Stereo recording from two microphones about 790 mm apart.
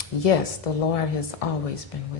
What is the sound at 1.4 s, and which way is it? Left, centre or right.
Speech, left.